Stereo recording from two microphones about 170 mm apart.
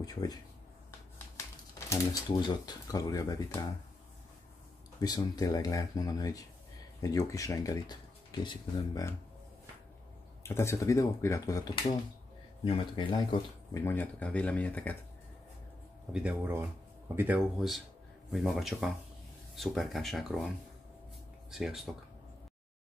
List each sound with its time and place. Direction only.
0.0 s speech: 20° left (ahead or behind)
1.9 s speech: 20° left (ahead or behind)
5.0 s speech: 25° left (ahead or behind)
10.4 s speech: 15° left (ahead or behind)
13.7 s speech: 10° left (ahead or behind)
16.1 s speech: 5° right (ahead or behind)
21.5 s speech: centre (ahead or behind)